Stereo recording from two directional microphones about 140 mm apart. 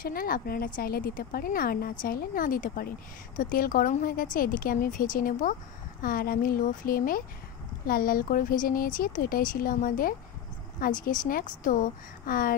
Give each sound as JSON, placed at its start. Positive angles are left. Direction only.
{"t": 0.0, "sound": "speech", "side_deg": 90}
{"t": 6.0, "sound": "speech", "side_deg": 90}
{"t": 10.8, "sound": "a woman's voice", "side_deg": 75}